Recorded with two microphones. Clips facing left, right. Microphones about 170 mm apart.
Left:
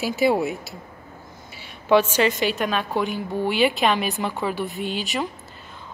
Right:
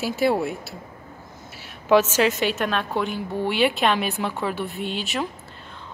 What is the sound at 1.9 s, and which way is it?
A woman's voice, 5° right (ahead or behind).